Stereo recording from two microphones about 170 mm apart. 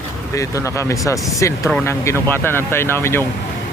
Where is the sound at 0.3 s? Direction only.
15° left (ahead or behind).